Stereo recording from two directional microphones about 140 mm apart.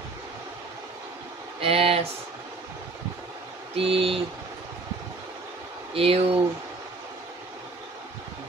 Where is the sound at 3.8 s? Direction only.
40° right (ahead or behind).